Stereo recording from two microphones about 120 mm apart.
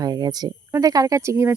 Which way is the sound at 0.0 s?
35° right (ahead or behind).